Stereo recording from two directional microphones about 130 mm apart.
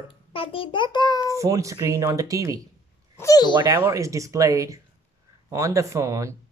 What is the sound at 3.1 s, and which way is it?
Speech, 25° left (ahead or behind).